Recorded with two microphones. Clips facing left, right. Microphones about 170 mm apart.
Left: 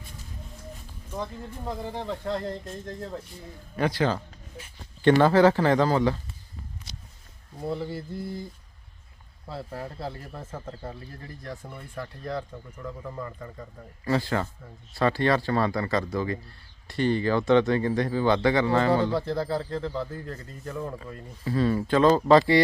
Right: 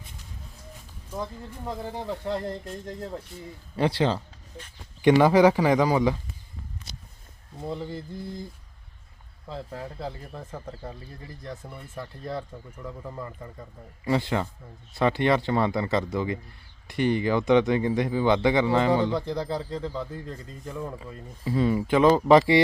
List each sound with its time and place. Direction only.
1.9 s speech: 10° right (ahead or behind)
3.8 s speech: 30° right (ahead or behind)
5.0 s speech: 15° right (ahead or behind)
7.6 s speech: 10° left (ahead or behind)
9.5 s speech: 10° left (ahead or behind)
14.0 s speech: 20° right (ahead or behind)